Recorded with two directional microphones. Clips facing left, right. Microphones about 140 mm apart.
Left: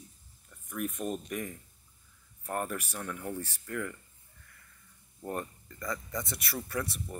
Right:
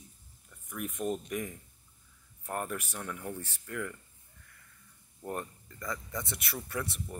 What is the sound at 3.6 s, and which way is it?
Speech, 5° right (ahead or behind).